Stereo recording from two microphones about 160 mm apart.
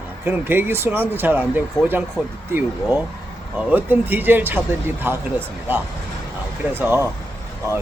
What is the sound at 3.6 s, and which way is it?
Speech, 10° right (ahead or behind).